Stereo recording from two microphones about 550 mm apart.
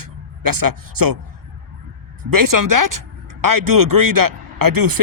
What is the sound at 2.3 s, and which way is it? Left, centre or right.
Speech, right.